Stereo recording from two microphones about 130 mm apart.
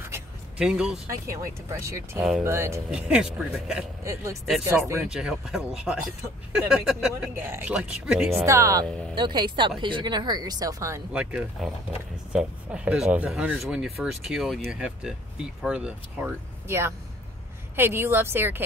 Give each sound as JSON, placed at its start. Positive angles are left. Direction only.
{"t": 0.6, "sound": "speech", "side_deg": -5}
{"t": 1.2, "sound": "speech", "side_deg": -25}
{"t": 2.9, "sound": "speech", "side_deg": -5}
{"t": 4.0, "sound": "speech", "side_deg": -25}
{"t": 5.0, "sound": "speech", "side_deg": -5}
{"t": 8.5, "sound": "speech", "side_deg": -25}
{"t": 9.1, "sound": "speech", "side_deg": -35}
{"t": 11.1, "sound": "speech", "side_deg": -5}